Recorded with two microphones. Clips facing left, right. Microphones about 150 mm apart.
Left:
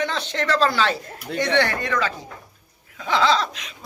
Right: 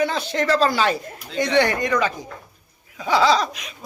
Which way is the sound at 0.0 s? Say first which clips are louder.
Right 3 dB; 10° right (ahead or behind).